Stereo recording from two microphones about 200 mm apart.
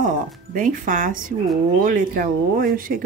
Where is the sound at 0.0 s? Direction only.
40° right (ahead or behind).